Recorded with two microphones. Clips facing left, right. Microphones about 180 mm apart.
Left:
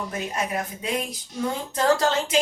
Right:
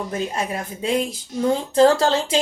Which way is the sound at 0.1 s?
30° right (ahead or behind).